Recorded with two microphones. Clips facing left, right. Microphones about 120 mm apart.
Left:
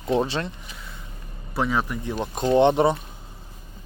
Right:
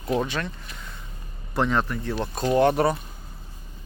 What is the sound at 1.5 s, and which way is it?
Speech, 5° left (ahead or behind).